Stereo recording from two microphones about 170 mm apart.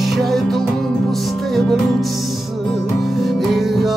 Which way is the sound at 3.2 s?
Centre (ahead or behind).